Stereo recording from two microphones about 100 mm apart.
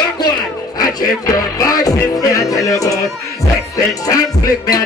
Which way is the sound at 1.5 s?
40° left (ahead or behind).